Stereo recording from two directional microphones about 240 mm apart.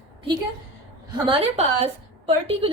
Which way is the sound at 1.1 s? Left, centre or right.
Right.